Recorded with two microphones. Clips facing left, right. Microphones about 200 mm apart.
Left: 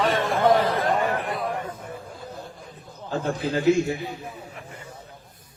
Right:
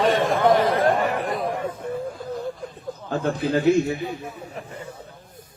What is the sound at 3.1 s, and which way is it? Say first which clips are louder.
Speech: right 3 dB; 55° right (ahead or behind).